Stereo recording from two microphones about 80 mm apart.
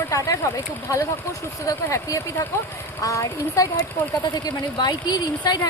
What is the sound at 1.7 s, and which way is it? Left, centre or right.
Speech, left.